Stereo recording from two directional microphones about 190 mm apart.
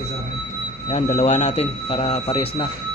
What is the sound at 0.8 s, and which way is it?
Speech, 30° left (ahead or behind).